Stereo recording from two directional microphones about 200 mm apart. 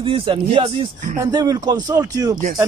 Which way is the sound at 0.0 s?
25° right (ahead or behind).